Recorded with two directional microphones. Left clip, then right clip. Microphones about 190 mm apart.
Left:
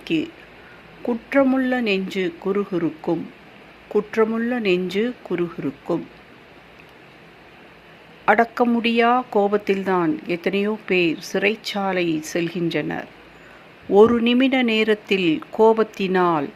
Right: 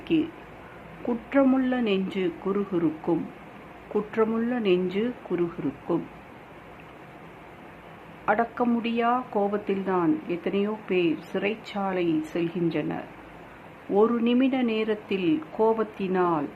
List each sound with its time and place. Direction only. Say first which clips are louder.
0.0 s speech: left 2 dB; 30° left (ahead or behind)
8.2 s speech: left 7 dB; 40° left (ahead or behind)